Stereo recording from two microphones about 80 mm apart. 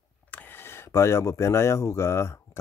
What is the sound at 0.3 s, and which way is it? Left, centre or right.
Speech, left.